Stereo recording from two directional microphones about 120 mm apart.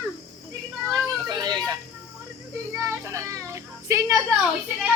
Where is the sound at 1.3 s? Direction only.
35° right (ahead or behind).